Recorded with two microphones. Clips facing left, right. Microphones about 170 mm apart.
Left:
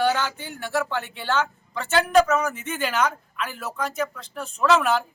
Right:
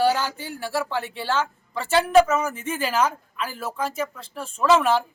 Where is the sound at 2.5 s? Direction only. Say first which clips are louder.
Right 1 dB; 30° right (ahead or behind).